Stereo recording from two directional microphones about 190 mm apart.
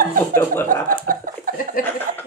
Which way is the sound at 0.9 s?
45° right (ahead or behind).